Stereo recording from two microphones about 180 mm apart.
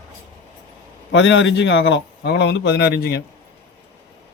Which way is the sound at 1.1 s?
90° left.